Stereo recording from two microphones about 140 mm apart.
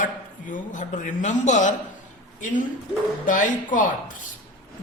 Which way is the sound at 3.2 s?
70° left (ahead or behind).